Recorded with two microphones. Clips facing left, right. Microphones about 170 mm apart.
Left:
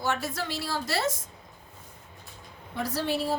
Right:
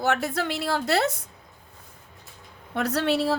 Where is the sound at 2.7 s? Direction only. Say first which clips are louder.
Right 5 dB; 70° right (ahead or behind).